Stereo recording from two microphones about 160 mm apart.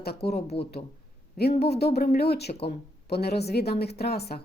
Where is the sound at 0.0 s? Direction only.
80° left.